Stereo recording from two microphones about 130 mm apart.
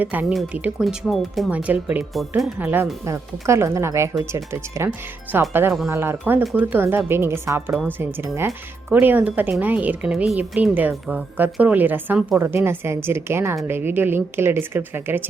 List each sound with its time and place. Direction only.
0.0 s speech: 15° right (ahead or behind)
1.5 s speech: 10° right (ahead or behind)
2.1 s speech: centre (ahead or behind)
2.6 s speech: 15° right (ahead or behind)